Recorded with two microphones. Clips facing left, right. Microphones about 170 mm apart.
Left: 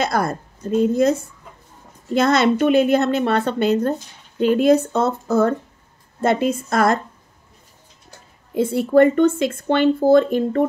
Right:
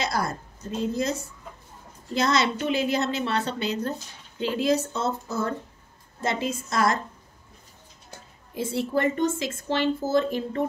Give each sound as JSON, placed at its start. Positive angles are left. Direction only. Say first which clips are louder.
{"t": 0.0, "sound": "speech", "louder": "left 7 dB", "side_deg": 55}
{"t": 8.5, "sound": "speech", "louder": "left 11 dB", "side_deg": 60}